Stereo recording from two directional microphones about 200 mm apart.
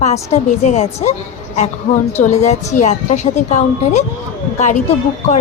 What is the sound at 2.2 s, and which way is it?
Speech, 35° left (ahead or behind).